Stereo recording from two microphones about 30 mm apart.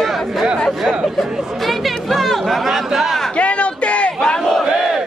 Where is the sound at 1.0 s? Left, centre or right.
Centre.